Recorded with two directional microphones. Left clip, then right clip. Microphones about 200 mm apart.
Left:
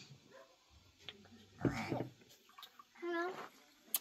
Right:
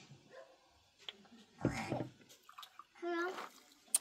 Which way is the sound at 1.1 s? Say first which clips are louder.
Right 2 dB; 30° left (ahead or behind).